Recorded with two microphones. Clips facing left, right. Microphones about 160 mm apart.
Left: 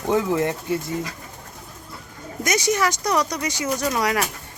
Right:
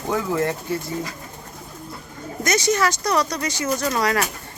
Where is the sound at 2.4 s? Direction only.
15° left (ahead or behind).